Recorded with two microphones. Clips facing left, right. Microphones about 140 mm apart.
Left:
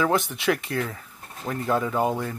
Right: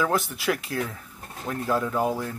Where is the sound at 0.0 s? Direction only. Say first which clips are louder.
Left 2 dB; centre (ahead or behind).